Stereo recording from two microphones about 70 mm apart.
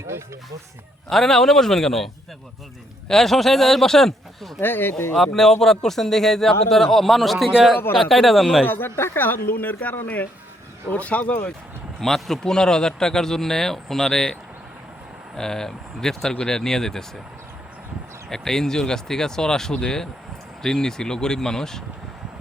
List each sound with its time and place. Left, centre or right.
1.1 s speech: centre
3.1 s speech: centre
4.6 s speech: left
5.1 s speech: centre
8.6 s speech: left
11.9 s speech: centre
15.4 s speech: centre
18.3 s speech: centre